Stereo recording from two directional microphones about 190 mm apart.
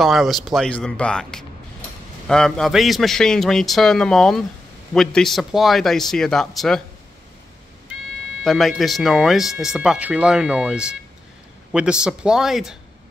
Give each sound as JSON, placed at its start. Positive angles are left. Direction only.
{"t": 0.0, "sound": "speech", "side_deg": 0}
{"t": 8.5, "sound": "speech", "side_deg": 0}